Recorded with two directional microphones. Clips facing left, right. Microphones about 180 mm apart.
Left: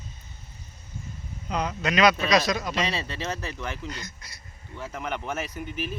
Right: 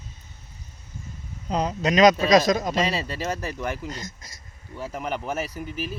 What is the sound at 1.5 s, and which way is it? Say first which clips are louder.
Speech: right 4 dB; 35° right (ahead or behind).